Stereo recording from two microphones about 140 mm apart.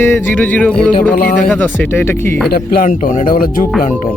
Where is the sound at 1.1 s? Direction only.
80° left.